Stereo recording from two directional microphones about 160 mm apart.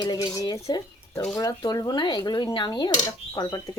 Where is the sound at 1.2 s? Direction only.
5° left (ahead or behind).